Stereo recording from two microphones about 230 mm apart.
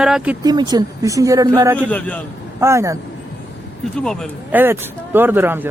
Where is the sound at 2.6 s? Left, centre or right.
Centre.